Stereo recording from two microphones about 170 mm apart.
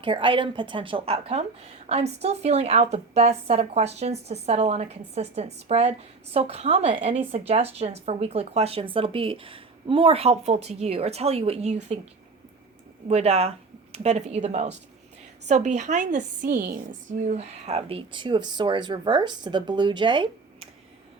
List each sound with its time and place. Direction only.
0.0 s a woman's voice: 30° right (ahead or behind)
13.1 s a woman's voice: 40° right (ahead or behind)